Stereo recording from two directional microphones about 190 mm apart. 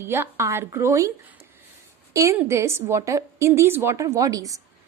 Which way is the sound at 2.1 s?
15° right (ahead or behind).